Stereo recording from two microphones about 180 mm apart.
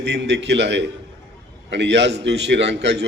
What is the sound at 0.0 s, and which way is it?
A man's voice, 70° right (ahead or behind).